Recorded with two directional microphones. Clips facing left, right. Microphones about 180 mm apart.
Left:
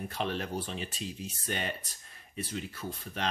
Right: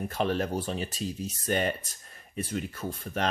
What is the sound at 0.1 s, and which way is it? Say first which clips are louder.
Speech: right 6 dB; 45° right (ahead or behind).